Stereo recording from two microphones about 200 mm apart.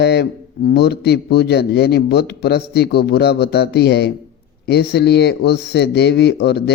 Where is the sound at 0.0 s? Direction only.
55° left (ahead or behind).